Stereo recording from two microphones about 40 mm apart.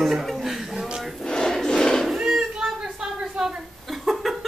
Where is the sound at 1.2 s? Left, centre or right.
Centre.